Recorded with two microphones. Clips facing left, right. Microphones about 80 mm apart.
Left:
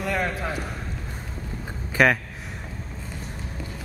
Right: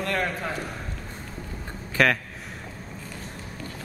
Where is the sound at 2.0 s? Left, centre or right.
Centre.